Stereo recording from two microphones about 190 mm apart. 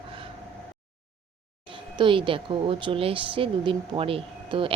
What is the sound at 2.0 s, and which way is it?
Speech, 25° right (ahead or behind).